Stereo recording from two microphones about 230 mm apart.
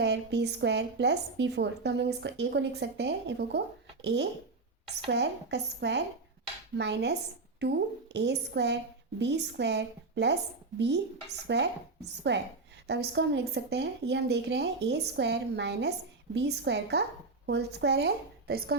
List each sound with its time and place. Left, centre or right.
0.0 s a woman's voice: right